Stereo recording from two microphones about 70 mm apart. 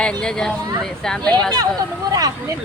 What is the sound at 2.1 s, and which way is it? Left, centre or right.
Speech, right.